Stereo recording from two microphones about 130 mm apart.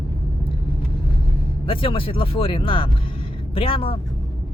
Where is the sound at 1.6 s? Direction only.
45° left (ahead or behind).